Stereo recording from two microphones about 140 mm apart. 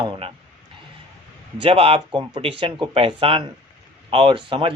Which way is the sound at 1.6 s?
45° right (ahead or behind).